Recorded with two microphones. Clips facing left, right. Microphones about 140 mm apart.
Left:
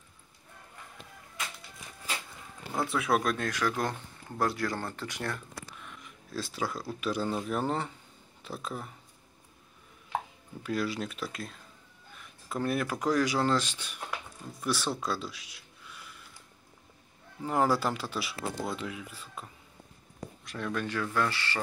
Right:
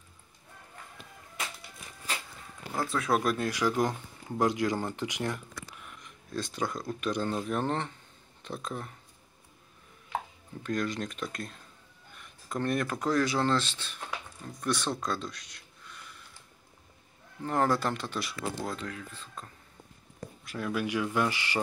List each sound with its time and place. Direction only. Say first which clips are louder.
2.7 s speech: even; centre (ahead or behind); by 5.4 s 15° right (ahead or behind)
5.9 s speech: right 2 dB; 5° left (ahead or behind)
10.6 s speech: even; 5° left (ahead or behind)
17.4 s speech: even; 5° left (ahead or behind)
20.4 s speech: right 2 dB; 5° right (ahead or behind)